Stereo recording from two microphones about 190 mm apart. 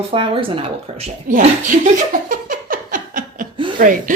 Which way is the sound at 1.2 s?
40° right (ahead or behind).